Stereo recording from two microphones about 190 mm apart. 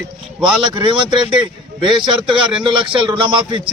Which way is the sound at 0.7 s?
25° right (ahead or behind).